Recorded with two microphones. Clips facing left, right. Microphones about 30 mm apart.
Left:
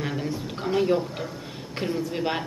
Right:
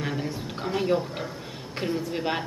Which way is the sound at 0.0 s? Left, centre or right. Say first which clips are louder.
Left 1 dB; centre.